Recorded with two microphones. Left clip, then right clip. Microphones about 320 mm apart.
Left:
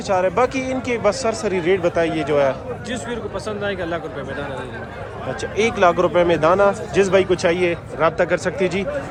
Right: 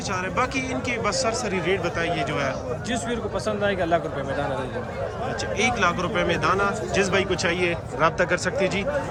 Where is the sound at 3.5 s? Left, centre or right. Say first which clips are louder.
Right 2 dB; right.